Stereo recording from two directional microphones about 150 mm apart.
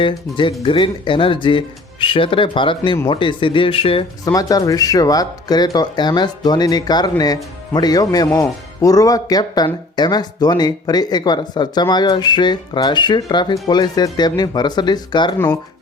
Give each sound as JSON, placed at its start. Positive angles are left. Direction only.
{"t": 0.0, "sound": "speech", "side_deg": 35}
{"t": 4.3, "sound": "speech", "side_deg": 25}